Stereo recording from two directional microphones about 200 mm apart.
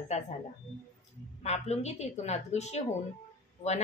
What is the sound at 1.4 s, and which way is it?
A woman's voice, 35° left (ahead or behind).